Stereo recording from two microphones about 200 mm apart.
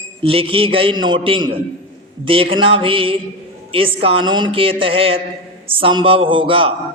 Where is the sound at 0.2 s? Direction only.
30° right (ahead or behind).